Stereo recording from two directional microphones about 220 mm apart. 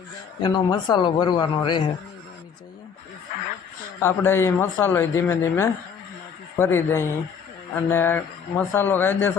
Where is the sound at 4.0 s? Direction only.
10° left (ahead or behind).